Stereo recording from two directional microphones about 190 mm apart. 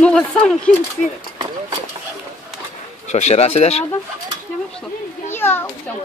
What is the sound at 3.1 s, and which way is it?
Speech, 35° left (ahead or behind).